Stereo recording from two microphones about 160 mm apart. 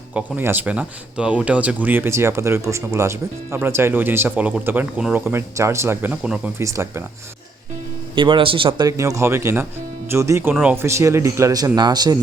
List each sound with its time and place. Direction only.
0.1 s speech: 10° right (ahead or behind)
6.6 s speech: 20° right (ahead or behind)
8.1 s a man's voice: 30° right (ahead or behind)
8.9 s speech: 20° right (ahead or behind)